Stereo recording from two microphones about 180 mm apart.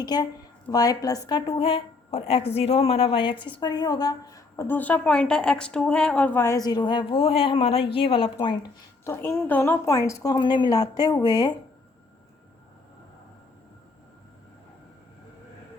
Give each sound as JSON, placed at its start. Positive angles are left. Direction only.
{"t": 0.0, "sound": "a woman's voice", "side_deg": 20}
{"t": 9.0, "sound": "a woman's voice", "side_deg": 15}